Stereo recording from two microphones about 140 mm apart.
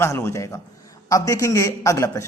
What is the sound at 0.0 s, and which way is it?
Speech, 20° left (ahead or behind).